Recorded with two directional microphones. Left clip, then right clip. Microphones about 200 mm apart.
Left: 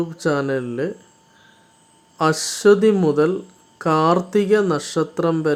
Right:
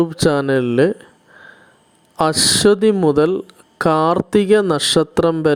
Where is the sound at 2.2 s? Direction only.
40° right (ahead or behind).